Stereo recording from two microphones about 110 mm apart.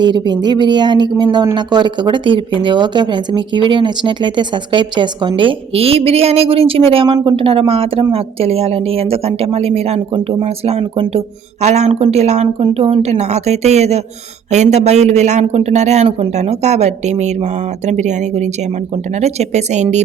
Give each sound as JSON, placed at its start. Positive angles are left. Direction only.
{"t": 0.0, "sound": "speech", "side_deg": -40}
{"t": 5.4, "sound": "a woman's voice", "side_deg": -55}
{"t": 11.6, "sound": "speech", "side_deg": -90}
{"t": 12.6, "sound": "a woman's voice", "side_deg": -60}
{"t": 14.5, "sound": "a man's voice", "side_deg": -90}